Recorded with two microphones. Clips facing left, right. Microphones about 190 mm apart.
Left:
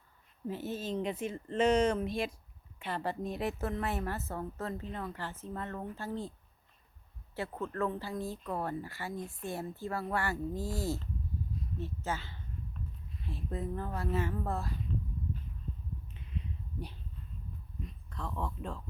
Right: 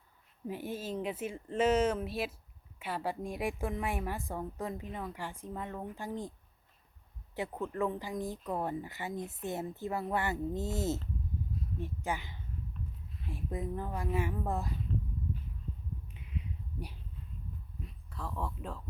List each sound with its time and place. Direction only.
0.4 s a woman's voice: 10° right (ahead or behind)
7.3 s a woman's voice: 15° right (ahead or behind)
18.1 s a woman's voice: 5° right (ahead or behind)